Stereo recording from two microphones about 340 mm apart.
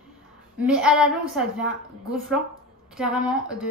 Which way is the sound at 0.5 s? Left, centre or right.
Centre.